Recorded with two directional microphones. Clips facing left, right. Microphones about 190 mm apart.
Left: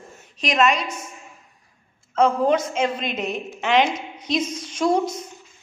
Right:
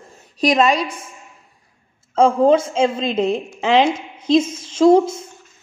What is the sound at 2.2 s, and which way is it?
A woman's voice, 30° right (ahead or behind).